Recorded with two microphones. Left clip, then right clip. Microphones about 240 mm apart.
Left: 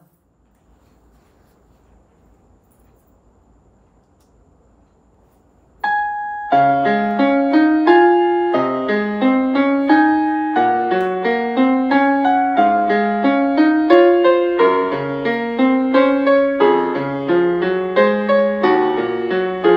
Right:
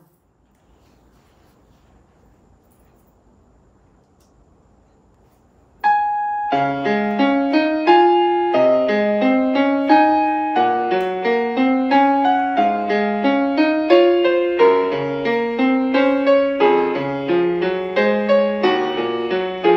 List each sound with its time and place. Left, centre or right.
5.8 s music: centre